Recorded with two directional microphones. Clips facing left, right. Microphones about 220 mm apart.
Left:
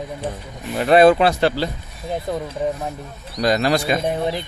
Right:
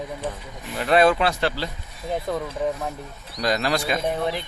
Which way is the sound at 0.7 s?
30° left (ahead or behind).